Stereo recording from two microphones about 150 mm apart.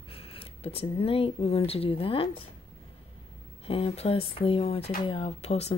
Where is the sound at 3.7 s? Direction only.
40° left (ahead or behind).